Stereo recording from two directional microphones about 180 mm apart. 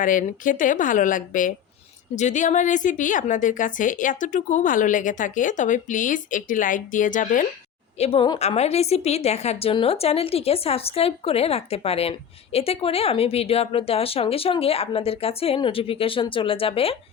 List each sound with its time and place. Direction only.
0.0 s a woman's voice: 45° left (ahead or behind)
7.9 s a woman's voice: 35° left (ahead or behind)